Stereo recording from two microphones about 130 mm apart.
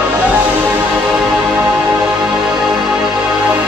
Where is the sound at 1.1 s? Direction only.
5° right (ahead or behind).